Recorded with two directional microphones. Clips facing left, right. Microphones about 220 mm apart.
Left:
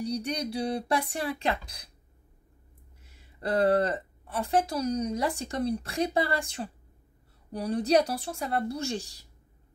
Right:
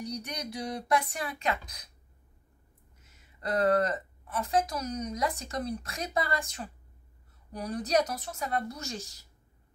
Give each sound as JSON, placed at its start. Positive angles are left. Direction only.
{"t": 0.0, "sound": "a woman's voice", "side_deg": 30}
{"t": 3.0, "sound": "a woman's voice", "side_deg": 30}